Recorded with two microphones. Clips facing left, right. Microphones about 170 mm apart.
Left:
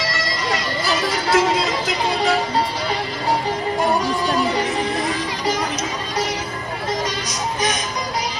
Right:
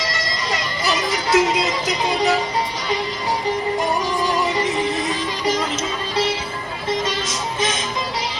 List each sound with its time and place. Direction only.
0.0 s music: 20° right (ahead or behind)
4.0 s music: 20° right (ahead or behind)
7.0 s music: 25° right (ahead or behind)